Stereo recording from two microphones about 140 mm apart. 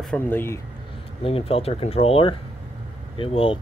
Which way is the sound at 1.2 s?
45° left (ahead or behind).